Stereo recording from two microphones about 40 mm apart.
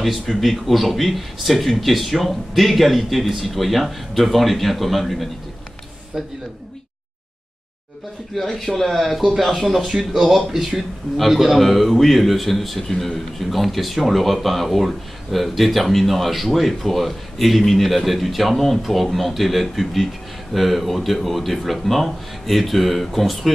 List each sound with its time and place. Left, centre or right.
0.0 s a man's voice: centre
8.4 s a man's voice: centre
9.9 s speech: centre
10.5 s a man's voice: centre